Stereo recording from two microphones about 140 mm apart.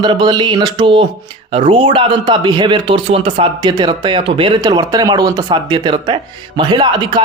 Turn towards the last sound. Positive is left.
turn(degrees=-30)  # may be behind; listen again after turning